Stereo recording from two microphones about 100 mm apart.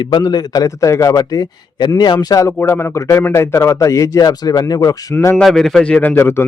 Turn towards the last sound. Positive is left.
turn(degrees=25)  # may be behind; listen again after turning